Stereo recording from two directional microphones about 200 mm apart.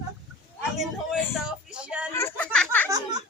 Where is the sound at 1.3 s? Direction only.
5° right (ahead or behind).